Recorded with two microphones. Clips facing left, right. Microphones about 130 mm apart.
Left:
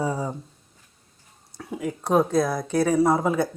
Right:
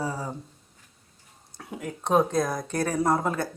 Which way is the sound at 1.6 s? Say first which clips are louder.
Left 6 dB; centre (ahead or behind).